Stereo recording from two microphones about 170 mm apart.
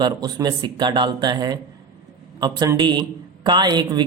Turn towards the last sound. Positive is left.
turn(degrees=-25)  # may be behind; listen again after turning